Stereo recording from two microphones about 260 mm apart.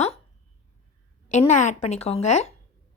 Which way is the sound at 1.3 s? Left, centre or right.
Left.